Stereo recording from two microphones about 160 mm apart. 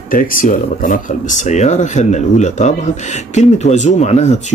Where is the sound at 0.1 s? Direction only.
60° left (ahead or behind).